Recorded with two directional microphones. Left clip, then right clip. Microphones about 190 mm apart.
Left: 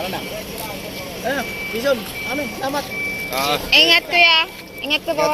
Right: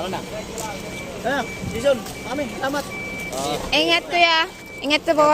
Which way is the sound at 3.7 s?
10° right (ahead or behind).